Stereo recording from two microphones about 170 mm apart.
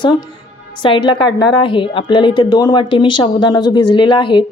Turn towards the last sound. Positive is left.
turn(degrees=30)  # may be behind; listen again after turning